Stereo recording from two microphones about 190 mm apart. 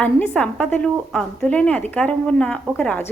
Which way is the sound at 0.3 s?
5° left (ahead or behind).